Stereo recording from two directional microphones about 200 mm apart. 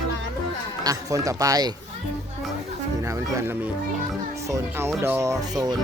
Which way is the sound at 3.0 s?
15° right (ahead or behind).